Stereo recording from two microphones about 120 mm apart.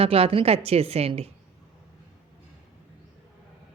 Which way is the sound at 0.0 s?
55° right (ahead or behind).